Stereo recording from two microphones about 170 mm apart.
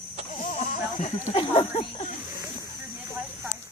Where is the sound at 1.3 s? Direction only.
30° left (ahead or behind).